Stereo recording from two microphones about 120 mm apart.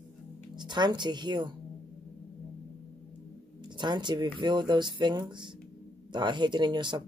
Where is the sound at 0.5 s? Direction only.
40° right (ahead or behind).